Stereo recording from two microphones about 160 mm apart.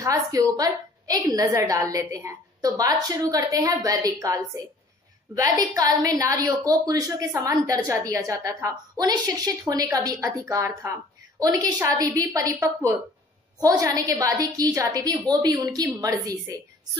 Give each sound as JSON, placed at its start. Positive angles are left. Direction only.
{"t": 0.0, "sound": "a woman's voice", "side_deg": -20}